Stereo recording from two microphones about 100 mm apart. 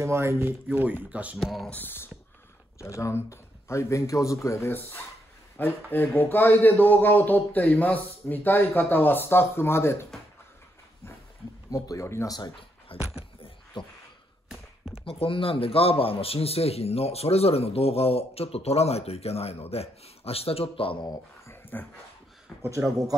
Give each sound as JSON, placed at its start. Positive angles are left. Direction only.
{"t": 0.0, "sound": "speech", "side_deg": -25}
{"t": 1.4, "sound": "speech", "side_deg": 0}
{"t": 1.7, "sound": "speech", "side_deg": 20}
{"t": 11.7, "sound": "speech", "side_deg": 30}
{"t": 12.4, "sound": "speech", "side_deg": 55}
{"t": 13.7, "sound": "a sound", "side_deg": 55}
{"t": 15.0, "sound": "a man's voice", "side_deg": 65}
{"t": 21.5, "sound": "dog", "side_deg": 20}
{"t": 22.6, "sound": "speech", "side_deg": -25}